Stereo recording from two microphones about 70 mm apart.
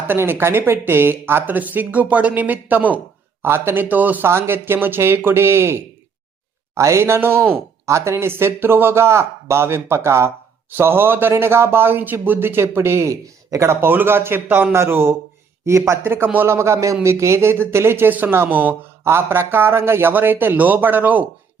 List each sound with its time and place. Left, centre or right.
0.1 s speech: right
3.4 s speech: right
3.8 s speech: right
4.3 s speech: right
7.9 s speech: right
13.7 s speech: right